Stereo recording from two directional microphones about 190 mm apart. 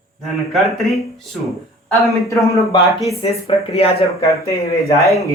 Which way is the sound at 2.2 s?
15° left (ahead or behind).